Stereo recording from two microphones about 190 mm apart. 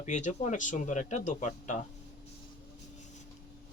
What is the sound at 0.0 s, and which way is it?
Speech, 40° left (ahead or behind).